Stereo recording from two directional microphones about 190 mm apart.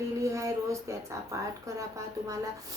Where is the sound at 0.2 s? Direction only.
15° right (ahead or behind).